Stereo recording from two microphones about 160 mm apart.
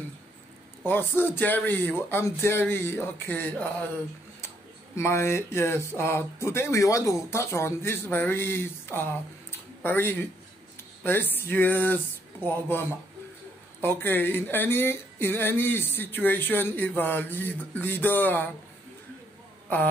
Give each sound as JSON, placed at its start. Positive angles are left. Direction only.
{"t": 0.8, "sound": "speech", "side_deg": 15}
{"t": 4.9, "sound": "speech", "side_deg": 15}